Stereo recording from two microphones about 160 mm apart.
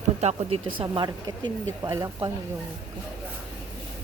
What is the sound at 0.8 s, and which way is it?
Speech, 30° right (ahead or behind).